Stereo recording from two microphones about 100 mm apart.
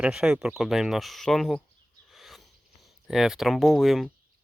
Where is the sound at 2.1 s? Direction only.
Centre (ahead or behind).